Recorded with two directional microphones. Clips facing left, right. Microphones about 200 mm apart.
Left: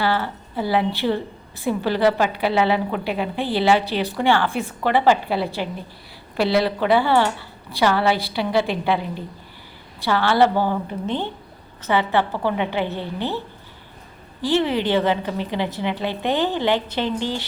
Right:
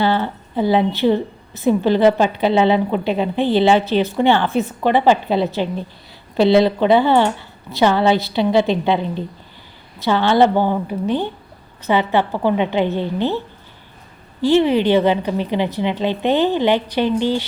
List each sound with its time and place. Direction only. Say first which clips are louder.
0.0 s a woman's voice: right 4 dB; 20° right (ahead or behind)
14.4 s a woman's voice: right 6 dB; 15° right (ahead or behind)